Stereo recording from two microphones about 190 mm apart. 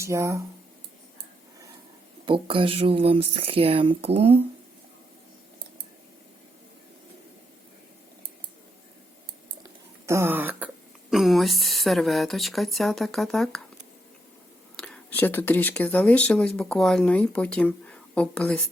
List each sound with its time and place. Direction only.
0.0 s speech: 15° right (ahead or behind)
2.2 s speech: 25° right (ahead or behind)
10.1 s throat clearing: 10° right (ahead or behind)
11.1 s a woman's voice: centre (ahead or behind)
14.8 s a woman's voice: 5° left (ahead or behind)